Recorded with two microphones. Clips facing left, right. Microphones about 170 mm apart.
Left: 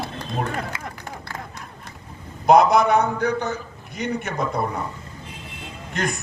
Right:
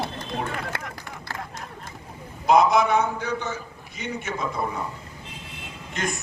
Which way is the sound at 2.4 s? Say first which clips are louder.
Left 3 dB; 60° left (ahead or behind).